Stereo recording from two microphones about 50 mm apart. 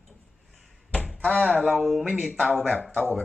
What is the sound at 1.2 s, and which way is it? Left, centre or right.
Speech, left.